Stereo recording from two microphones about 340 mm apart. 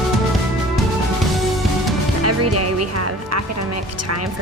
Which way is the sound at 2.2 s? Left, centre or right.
Right.